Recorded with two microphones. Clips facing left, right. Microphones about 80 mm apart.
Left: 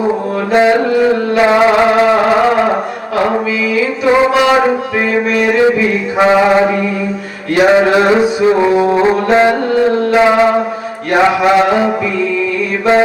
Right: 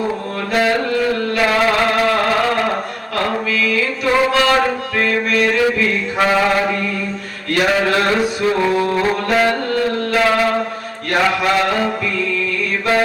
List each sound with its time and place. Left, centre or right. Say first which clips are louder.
0.1 s music: left 7 dB; left